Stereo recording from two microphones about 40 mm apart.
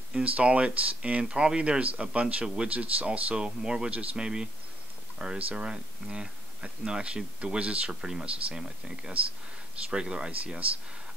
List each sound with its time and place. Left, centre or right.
0.1 s speech: right
2.4 s speech: centre
2.7 s speech: right
3.1 s speech: right
3.9 s speech: right
4.2 s speech: centre
8.0 s speech: centre